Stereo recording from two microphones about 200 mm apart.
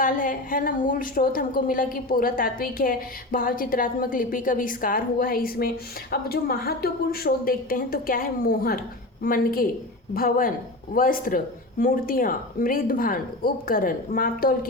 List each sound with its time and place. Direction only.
0.0 s a woman's voice: 45° left (ahead or behind)